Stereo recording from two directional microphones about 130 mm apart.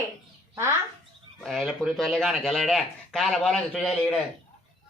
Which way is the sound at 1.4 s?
Centre (ahead or behind).